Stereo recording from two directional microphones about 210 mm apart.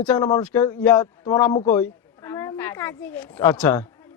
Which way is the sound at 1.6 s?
10° left (ahead or behind).